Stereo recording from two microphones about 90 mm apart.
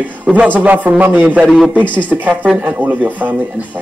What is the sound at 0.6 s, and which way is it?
A woman's voice, 20° right (ahead or behind).